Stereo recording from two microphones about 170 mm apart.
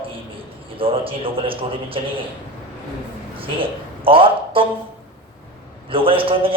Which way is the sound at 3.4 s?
30° right (ahead or behind).